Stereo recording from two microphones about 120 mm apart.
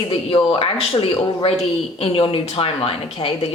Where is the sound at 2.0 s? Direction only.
50° left (ahead or behind).